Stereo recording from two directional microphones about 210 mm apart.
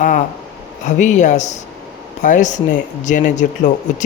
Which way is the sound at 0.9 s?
35° left (ahead or behind).